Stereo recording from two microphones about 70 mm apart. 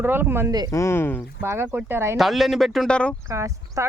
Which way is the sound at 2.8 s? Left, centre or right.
Centre.